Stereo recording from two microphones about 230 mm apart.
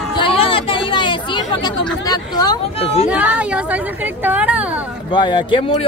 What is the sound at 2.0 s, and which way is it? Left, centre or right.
Speech, centre.